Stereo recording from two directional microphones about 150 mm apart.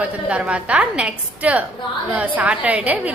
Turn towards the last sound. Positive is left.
turn(degrees=-10)  # may be behind; listen again after turning